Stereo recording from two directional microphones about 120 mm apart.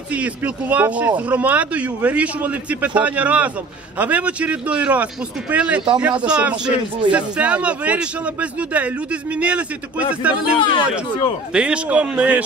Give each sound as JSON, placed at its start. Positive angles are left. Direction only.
{"t": 0.1, "sound": "speech", "side_deg": -10}
{"t": 10.7, "sound": "speech", "side_deg": 45}
{"t": 11.5, "sound": "speech", "side_deg": -10}